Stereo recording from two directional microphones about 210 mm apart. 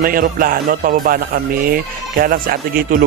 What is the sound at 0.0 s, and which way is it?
Speech, 40° right (ahead or behind).